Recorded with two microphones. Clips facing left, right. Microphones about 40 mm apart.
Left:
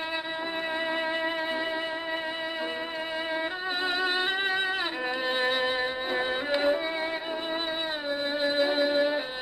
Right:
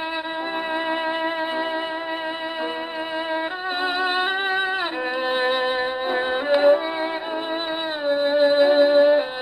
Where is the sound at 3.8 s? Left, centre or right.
Right.